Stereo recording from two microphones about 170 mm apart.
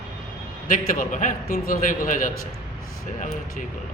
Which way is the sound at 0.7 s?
50° left (ahead or behind).